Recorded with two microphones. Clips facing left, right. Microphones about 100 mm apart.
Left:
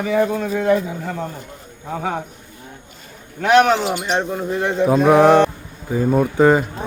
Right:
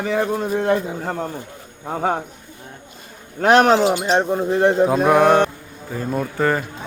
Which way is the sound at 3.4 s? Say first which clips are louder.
Right 1 dB; 40° right (ahead or behind).